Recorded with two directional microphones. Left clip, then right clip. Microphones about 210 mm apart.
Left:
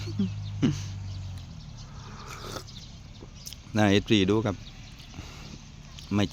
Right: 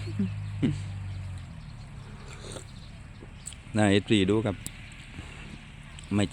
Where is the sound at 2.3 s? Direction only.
20° left (ahead or behind).